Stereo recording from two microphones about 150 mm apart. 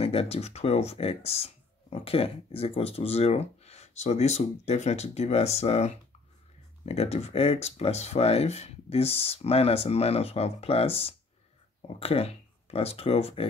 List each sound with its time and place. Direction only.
0.0 s speech: 40° left (ahead or behind)